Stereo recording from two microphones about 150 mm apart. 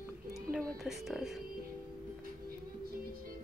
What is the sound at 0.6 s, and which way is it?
Speech, centre (ahead or behind).